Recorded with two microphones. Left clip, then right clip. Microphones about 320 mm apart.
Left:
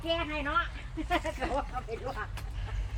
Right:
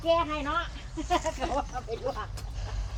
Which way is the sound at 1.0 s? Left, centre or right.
Right.